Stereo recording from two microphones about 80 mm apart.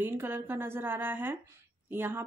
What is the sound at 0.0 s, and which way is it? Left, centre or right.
Speech, right.